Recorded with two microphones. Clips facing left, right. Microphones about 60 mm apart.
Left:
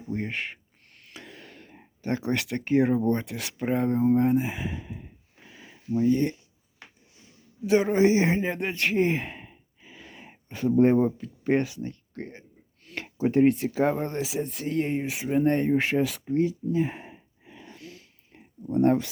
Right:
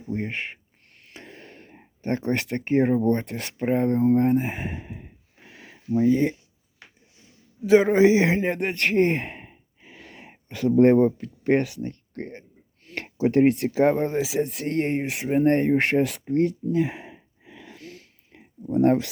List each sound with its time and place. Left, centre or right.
0.1 s speech: right
1.1 s a sound: right
3.2 s speech: right
3.6 s speech: right
3.8 s speech: centre
4.2 s a sound: right
7.9 s sigh: right
10.8 s speech: right
11.2 s a sound: right
13.1 s speech: right
14.1 s speech: right
15.3 s a sound: right